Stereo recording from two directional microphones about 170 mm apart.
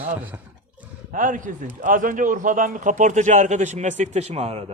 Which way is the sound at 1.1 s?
50° right (ahead or behind).